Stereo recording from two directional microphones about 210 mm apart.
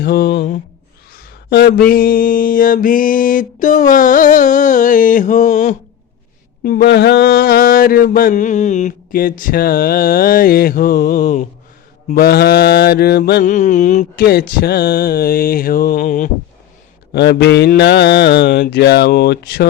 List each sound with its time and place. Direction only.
0.0 s mantra: 50° left (ahead or behind)
6.7 s mantra: 45° left (ahead or behind)
17.1 s mantra: 50° left (ahead or behind)